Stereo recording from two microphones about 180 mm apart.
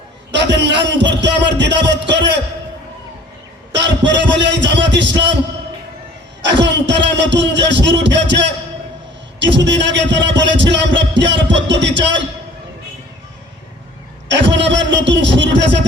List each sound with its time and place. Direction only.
0.3 s a man's voice: 75° right (ahead or behind)
3.8 s music: 80° right
6.4 s speech: 80° right
7.2 s music: 80° right
14.3 s music: 80° right